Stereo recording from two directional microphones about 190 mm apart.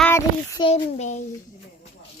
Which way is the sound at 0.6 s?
35° left (ahead or behind).